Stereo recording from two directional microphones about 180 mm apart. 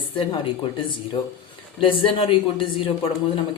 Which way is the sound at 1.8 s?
30° left (ahead or behind).